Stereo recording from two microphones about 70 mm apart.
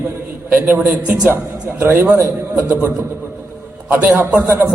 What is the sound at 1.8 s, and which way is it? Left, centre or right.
Speech, right.